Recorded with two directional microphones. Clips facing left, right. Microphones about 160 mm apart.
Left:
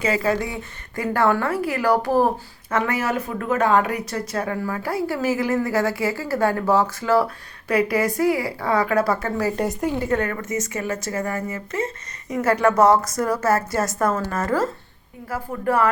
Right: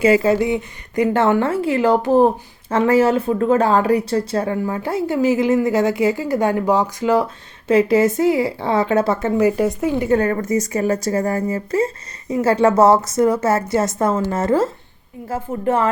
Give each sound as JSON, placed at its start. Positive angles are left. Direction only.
{"t": 0.0, "sound": "speech", "side_deg": -25}
{"t": 9.6, "sound": "speech", "side_deg": -5}
{"t": 10.0, "sound": "speech", "side_deg": -30}